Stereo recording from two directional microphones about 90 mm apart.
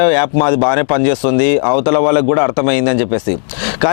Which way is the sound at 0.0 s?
15° left (ahead or behind).